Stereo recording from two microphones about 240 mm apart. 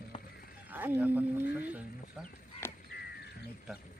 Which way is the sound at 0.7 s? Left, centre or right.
Centre.